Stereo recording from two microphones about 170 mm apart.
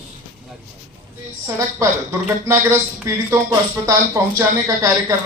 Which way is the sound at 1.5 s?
15° right (ahead or behind).